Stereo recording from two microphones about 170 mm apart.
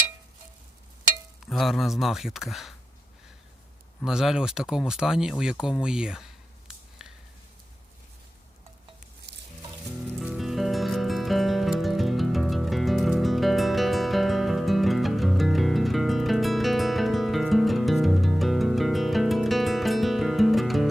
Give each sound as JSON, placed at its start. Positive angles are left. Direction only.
{"t": 1.5, "sound": "speech", "side_deg": 0}
{"t": 4.0, "sound": "speech", "side_deg": -5}
{"t": 7.0, "sound": "a sound", "side_deg": -5}
{"t": 9.3, "sound": "music", "side_deg": -90}
{"t": 10.2, "sound": "music", "side_deg": 0}